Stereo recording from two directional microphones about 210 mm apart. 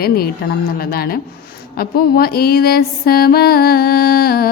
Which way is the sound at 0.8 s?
45° left (ahead or behind).